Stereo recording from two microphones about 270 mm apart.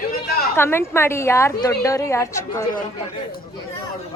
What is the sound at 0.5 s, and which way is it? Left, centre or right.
A woman's voice, centre.